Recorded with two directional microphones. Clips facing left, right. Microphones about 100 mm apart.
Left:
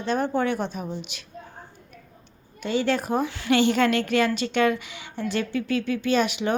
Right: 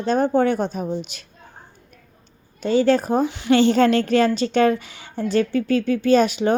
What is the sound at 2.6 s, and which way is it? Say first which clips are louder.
A woman's voice: right 7 dB; 35° right (ahead or behind).